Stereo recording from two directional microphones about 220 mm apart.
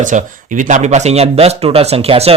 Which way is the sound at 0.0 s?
35° right (ahead or behind).